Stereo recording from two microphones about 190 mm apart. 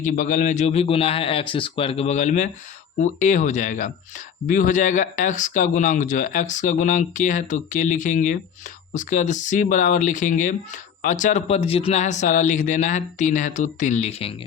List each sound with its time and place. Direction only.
0.0 s speech: 45° left (ahead or behind)